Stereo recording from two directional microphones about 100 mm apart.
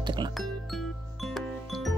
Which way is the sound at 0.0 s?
50° right (ahead or behind).